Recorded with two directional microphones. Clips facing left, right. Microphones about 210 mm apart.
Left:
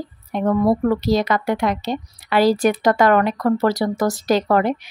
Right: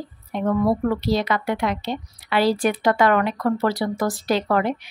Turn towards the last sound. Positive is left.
turn(degrees=40)  # may be behind; listen again after turning